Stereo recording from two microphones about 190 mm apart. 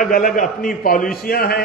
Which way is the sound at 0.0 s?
45° left (ahead or behind).